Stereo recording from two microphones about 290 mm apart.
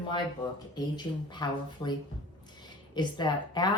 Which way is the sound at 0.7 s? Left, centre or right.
Centre.